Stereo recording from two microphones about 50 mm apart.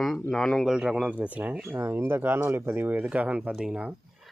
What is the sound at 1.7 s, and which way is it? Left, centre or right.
Speech, right.